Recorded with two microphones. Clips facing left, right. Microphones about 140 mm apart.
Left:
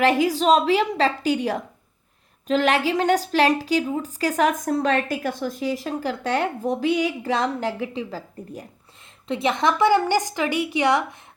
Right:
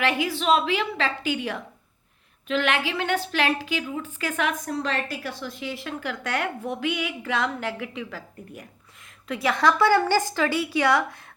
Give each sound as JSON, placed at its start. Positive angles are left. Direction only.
{"t": 0.0, "sound": "a woman's voice", "side_deg": 40}